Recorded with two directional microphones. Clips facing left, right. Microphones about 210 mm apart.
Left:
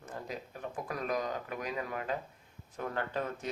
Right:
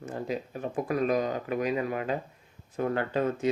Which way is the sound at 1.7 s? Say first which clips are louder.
Right 8 dB; 20° right (ahead or behind).